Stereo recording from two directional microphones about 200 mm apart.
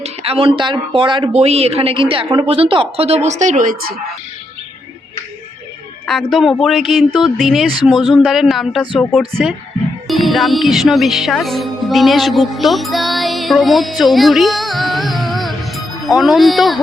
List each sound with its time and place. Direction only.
0.0 s speech: 30° right (ahead or behind); by 4.0 s 45° right (ahead or behind)
6.1 s speech: centre (ahead or behind)
10.1 s music: centre (ahead or behind)